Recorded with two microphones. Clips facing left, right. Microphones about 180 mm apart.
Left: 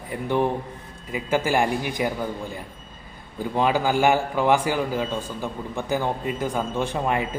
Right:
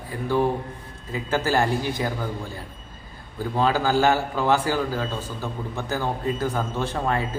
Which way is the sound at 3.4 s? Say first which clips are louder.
Even; 15° left (ahead or behind).